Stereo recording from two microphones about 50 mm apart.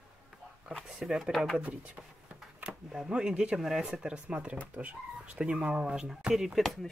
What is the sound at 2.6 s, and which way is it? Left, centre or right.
Speech, centre.